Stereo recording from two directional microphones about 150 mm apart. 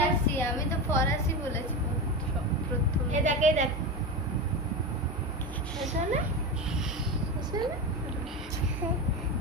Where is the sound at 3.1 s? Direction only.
55° right (ahead or behind).